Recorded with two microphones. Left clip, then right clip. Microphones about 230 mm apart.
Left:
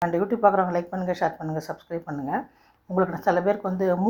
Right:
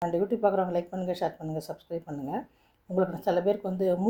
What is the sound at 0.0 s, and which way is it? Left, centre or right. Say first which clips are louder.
A woman's voice: left 5 dB; centre.